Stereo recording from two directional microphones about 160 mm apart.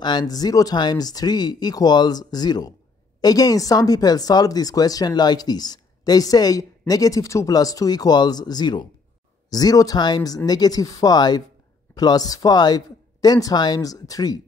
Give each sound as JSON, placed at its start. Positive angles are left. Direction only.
{"t": 0.0, "sound": "speech", "side_deg": 25}